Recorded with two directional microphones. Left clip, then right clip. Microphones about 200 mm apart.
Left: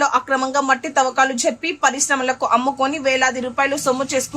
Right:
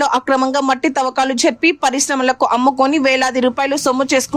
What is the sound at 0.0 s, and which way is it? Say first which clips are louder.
A woman's voice: right 3 dB; 45° right (ahead or behind).